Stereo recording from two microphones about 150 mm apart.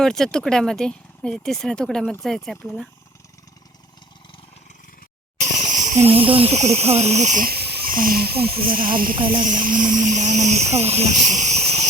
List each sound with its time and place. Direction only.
0.0 s speech: 5° left (ahead or behind)
5.4 s speech: 55° right (ahead or behind)
7.4 s cricket: 90° right; by 9.1 s 70° right (ahead or behind)
9.1 s cricket: 35° right (ahead or behind)
9.4 s speech: 65° right (ahead or behind); by 11.9 s 45° right (ahead or behind)